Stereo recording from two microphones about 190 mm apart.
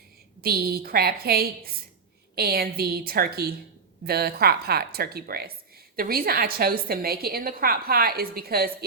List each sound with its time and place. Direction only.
0.4 s a woman's voice: 55° right (ahead or behind)